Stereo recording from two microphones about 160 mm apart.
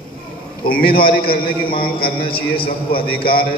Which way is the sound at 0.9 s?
70° left (ahead or behind).